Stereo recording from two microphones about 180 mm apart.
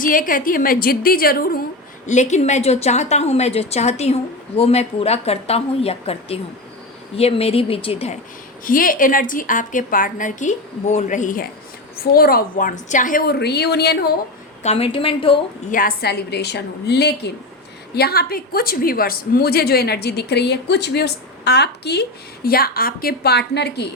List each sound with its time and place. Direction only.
0.0 s a woman's voice: 50° left (ahead or behind)
2.0 s a woman's voice: 40° left (ahead or behind)
8.6 s a woman's voice: 50° left (ahead or behind)
12.1 s a woman's voice: 55° left (ahead or behind)
14.6 s a woman's voice: 35° left (ahead or behind)
15.7 s a woman's voice: 55° left (ahead or behind)
22.4 s a woman's voice: 55° left (ahead or behind)